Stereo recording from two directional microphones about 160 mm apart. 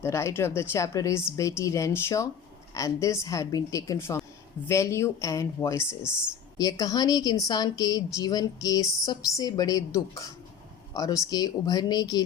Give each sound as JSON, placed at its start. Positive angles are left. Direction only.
{"t": 0.0, "sound": "a woman's voice", "side_deg": 15}
{"t": 6.0, "sound": "speech", "side_deg": -5}
{"t": 6.6, "sound": "a woman's voice", "side_deg": 20}